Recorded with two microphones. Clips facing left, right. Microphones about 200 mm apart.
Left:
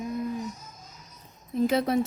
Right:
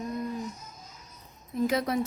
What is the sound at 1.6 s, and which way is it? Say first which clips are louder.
Speech: left 3 dB; 25° left (ahead or behind).